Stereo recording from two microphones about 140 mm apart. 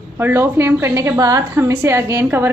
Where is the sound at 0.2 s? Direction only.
15° right (ahead or behind).